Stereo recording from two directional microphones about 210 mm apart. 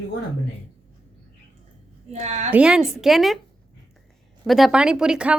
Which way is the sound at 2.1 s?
30° right (ahead or behind).